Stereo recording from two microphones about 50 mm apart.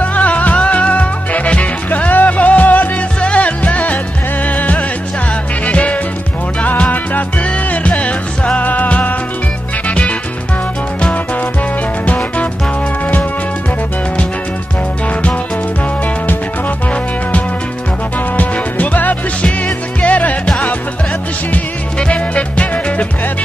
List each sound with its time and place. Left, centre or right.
0.0 s music: left
12.1 s music: left
18.3 s music: left
21.9 s music: left